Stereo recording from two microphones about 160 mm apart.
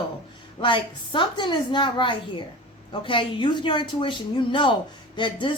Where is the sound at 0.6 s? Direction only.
30° left (ahead or behind).